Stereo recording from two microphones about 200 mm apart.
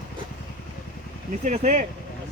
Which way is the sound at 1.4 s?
35° right (ahead or behind).